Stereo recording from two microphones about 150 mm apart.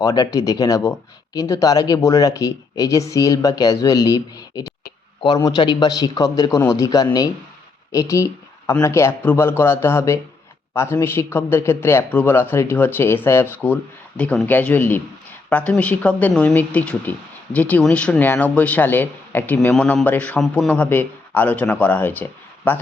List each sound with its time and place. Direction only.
0.0 s a man's voice: 20° left (ahead or behind)